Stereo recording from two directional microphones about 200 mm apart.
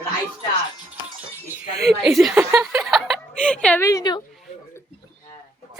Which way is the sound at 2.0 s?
Centre (ahead or behind).